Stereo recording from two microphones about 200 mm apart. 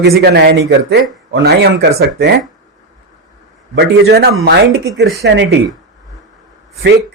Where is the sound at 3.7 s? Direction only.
55° right (ahead or behind).